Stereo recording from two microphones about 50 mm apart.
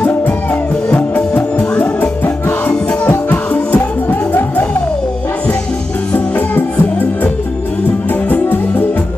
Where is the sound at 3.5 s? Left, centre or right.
Left.